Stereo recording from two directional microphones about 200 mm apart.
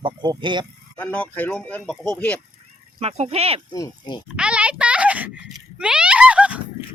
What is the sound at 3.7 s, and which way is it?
Speech, 20° left (ahead or behind).